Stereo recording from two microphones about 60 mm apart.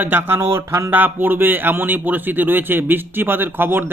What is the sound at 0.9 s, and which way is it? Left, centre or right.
Speech, right.